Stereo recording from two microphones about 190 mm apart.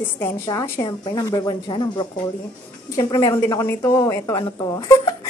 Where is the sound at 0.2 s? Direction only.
20° left (ahead or behind).